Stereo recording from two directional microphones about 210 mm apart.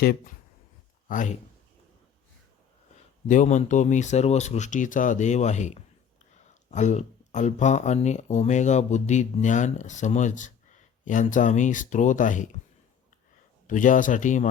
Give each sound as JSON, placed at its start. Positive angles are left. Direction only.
{"t": 0.0, "sound": "speech", "side_deg": 45}
{"t": 3.2, "sound": "speech", "side_deg": 35}
{"t": 13.7, "sound": "speech", "side_deg": 40}